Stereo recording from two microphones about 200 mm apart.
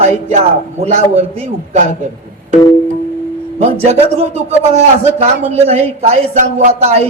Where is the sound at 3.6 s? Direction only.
30° right (ahead or behind).